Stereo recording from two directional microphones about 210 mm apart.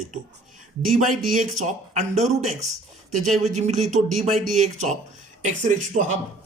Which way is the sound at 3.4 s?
35° right (ahead or behind).